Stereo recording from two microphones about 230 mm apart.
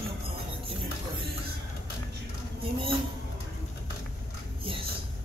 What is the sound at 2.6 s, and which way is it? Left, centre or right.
Speech, right.